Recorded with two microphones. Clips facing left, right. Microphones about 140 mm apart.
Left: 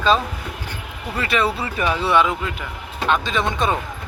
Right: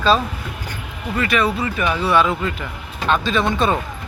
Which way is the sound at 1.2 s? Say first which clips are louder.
Right 2 dB; 30° left (ahead or behind).